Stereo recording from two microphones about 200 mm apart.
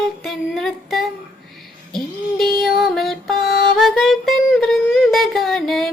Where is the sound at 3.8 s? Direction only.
Centre (ahead or behind).